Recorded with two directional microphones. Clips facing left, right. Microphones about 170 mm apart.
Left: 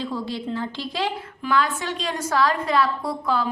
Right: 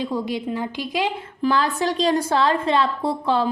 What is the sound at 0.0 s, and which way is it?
A woman's voice, 15° right (ahead or behind).